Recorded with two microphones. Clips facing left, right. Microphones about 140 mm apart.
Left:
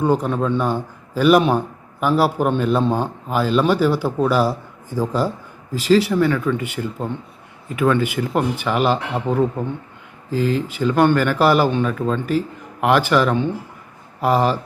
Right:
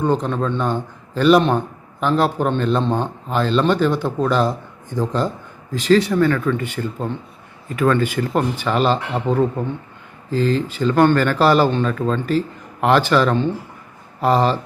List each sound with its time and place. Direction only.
0.0 s a man's voice: 10° left (ahead or behind)